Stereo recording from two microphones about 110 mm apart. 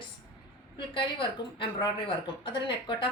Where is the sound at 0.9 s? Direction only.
50° left (ahead or behind).